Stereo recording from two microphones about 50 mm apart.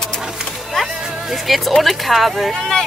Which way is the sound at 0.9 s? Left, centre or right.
Centre.